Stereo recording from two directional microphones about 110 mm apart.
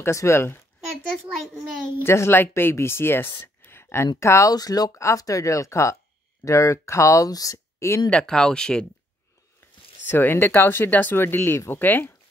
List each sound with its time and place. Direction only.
0.0 s speech: 25° left (ahead or behind)
2.0 s speech: 25° left (ahead or behind)
8.1 s speech: 5° left (ahead or behind)
10.0 s speech: 20° left (ahead or behind)